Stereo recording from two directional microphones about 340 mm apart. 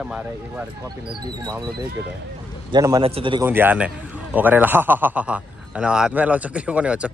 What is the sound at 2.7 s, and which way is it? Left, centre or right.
A man's voice, centre.